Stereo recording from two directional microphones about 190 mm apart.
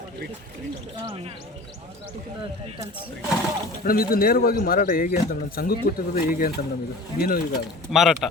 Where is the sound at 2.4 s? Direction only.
20° right (ahead or behind).